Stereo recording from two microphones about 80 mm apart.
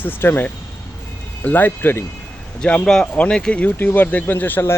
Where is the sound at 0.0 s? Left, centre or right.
Left.